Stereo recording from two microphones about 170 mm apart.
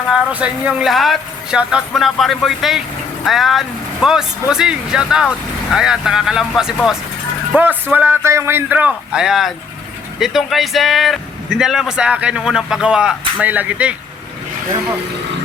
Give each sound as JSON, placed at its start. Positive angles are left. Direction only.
{"t": 0.1, "sound": "a man's voice", "side_deg": -5}